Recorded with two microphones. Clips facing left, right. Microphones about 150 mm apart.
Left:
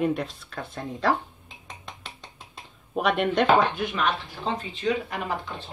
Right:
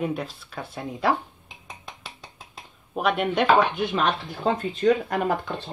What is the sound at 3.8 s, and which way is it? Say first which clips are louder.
Speech: right 3 dB; 30° right (ahead or behind).